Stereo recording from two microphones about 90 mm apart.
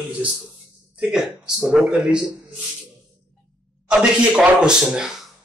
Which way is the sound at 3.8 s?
10° right (ahead or behind).